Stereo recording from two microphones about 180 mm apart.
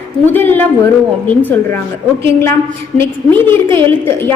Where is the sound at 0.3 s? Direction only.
10° left (ahead or behind).